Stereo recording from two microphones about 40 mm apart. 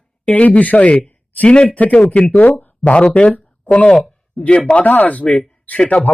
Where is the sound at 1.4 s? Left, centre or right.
Left.